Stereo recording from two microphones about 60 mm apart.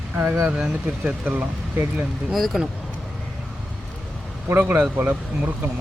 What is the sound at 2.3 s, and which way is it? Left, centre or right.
Speech, centre.